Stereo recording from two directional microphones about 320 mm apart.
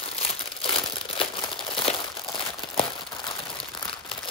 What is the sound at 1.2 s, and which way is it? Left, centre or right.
Crumpling, centre.